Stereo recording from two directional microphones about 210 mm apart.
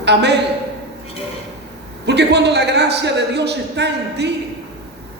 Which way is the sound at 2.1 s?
55° right (ahead or behind).